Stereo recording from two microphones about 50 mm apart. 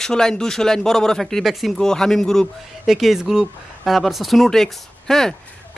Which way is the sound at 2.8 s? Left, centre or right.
Centre.